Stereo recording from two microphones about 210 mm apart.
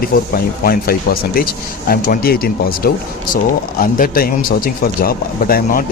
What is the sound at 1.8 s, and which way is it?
Speech, 45° left (ahead or behind).